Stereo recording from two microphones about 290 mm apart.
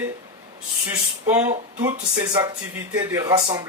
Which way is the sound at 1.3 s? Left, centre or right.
Centre.